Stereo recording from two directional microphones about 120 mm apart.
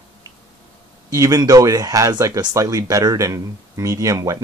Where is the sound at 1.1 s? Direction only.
30° right (ahead or behind).